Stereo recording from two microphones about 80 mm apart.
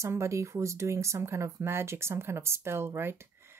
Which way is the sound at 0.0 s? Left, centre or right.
Right.